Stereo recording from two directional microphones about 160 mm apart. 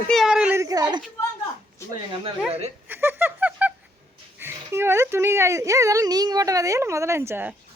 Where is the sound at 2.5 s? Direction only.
40° right (ahead or behind).